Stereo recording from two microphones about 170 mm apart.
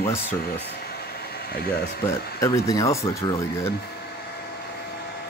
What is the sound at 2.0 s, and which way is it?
Speech, 15° left (ahead or behind).